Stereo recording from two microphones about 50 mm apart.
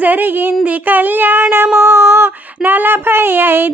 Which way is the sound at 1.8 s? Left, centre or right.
Right.